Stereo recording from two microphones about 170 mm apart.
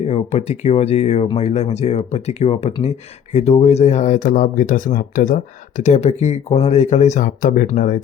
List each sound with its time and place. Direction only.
0.0 s speech: 40° left (ahead or behind)